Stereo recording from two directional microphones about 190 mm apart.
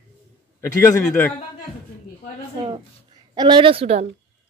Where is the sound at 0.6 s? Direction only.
15° left (ahead or behind).